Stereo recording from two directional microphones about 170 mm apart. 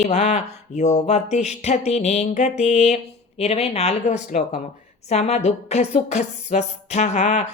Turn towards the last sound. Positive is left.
turn(degrees=45)  # may be behind; listen again after turning